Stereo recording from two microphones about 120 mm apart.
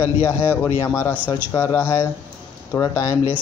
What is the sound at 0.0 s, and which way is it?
A man's voice, 20° left (ahead or behind).